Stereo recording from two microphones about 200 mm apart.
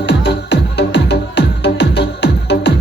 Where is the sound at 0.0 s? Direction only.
60° left (ahead or behind).